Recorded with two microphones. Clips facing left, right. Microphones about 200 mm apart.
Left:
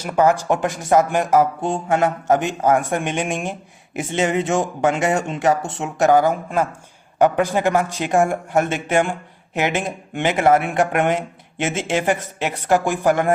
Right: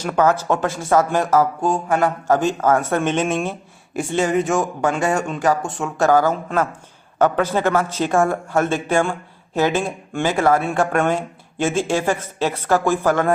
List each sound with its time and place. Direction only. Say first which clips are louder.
0.0 s speech: left 1 dB; 10° left (ahead or behind)